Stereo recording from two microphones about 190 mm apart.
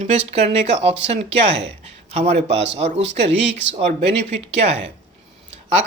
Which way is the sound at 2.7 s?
35° right (ahead or behind).